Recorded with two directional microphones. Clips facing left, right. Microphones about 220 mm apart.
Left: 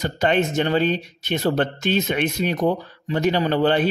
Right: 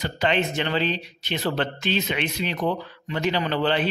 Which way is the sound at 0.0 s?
45° left (ahead or behind).